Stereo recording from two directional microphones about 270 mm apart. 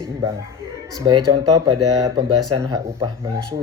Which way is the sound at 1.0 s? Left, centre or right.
Centre.